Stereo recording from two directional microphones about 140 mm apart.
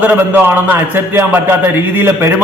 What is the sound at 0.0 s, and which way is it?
A man's voice, 15° right (ahead or behind).